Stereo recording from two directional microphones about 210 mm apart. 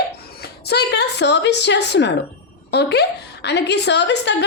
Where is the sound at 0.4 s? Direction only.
50° left (ahead or behind).